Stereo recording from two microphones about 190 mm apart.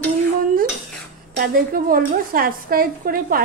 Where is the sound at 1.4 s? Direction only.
50° right (ahead or behind).